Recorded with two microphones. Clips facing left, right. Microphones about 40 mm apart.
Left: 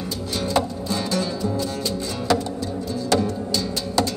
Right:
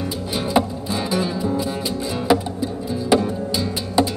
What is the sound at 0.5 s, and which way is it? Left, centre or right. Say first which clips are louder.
Music: right 3 dB; centre.